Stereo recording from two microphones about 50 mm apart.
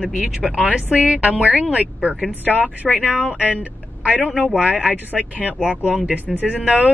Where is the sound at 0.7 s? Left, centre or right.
Right.